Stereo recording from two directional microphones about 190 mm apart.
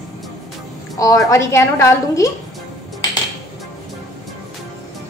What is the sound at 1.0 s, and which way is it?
A woman's voice, 20° left (ahead or behind).